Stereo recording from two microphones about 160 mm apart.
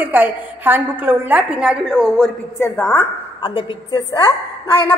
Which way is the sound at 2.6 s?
10° left (ahead or behind).